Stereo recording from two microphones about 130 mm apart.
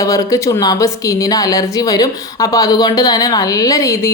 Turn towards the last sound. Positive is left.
turn(degrees=25)  # may be behind; listen again after turning